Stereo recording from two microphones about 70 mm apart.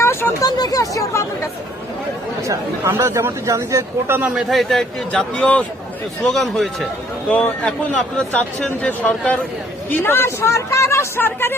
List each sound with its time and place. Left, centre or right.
0.0 s a sound: left
0.4 s speech: left
2.5 s speech: right
4.4 s a man's voice: centre
5.4 s speech: centre
6.3 s a man's voice: centre
7.3 s speech: centre
9.0 s speech: centre
9.9 s speech: left